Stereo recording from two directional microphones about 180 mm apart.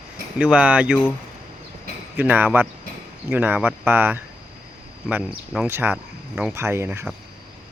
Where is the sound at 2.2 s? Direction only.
10° right (ahead or behind).